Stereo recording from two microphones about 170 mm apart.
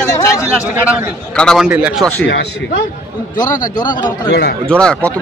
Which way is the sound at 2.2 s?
75° left (ahead or behind).